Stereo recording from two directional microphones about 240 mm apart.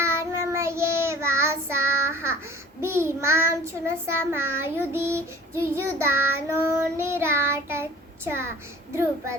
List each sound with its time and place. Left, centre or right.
0.0 s child singing: centre